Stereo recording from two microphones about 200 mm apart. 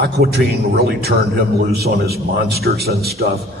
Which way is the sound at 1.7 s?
50° right (ahead or behind).